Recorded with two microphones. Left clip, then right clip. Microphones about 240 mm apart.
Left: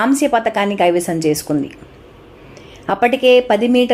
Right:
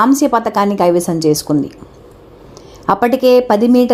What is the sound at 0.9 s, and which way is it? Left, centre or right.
Speech, right.